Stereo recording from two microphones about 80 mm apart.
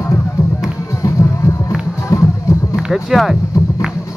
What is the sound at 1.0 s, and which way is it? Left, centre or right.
Music, left.